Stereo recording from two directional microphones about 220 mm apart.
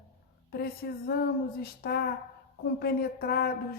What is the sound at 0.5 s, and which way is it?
A woman's voice, 45° left (ahead or behind).